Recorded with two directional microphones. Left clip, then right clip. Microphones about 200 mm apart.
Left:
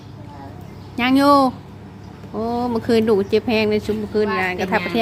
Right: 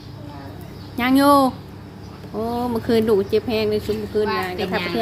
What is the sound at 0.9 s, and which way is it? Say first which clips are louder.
A woman's voice: left 1 dB; centre (ahead or behind).